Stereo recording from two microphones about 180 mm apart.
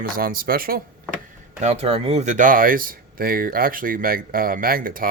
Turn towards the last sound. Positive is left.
turn(degrees=-50)  # may be behind; listen again after turning